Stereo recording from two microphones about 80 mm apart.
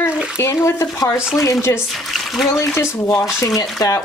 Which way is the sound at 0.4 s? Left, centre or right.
Left.